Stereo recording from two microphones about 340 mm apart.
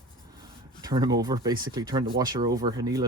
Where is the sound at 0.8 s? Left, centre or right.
Centre.